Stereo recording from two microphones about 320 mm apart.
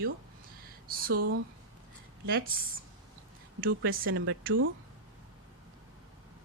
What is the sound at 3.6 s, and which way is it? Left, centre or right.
Speech, right.